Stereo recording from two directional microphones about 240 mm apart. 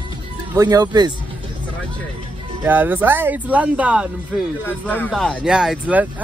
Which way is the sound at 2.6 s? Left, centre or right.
Centre.